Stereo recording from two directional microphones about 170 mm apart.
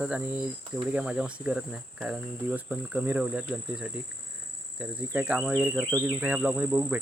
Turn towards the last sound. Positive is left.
turn(degrees=-5)  # may be behind; listen again after turning